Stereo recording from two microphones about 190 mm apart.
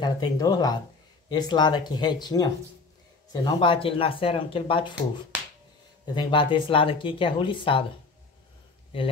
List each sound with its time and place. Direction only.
0.0 s speech: 20° left (ahead or behind)
6.1 s speech: 25° left (ahead or behind)